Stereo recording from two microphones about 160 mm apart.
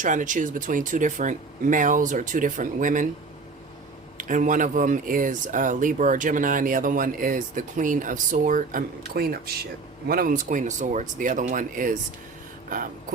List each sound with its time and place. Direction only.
0.0 s speech: 55° right (ahead or behind)
4.2 s speech: 55° right (ahead or behind)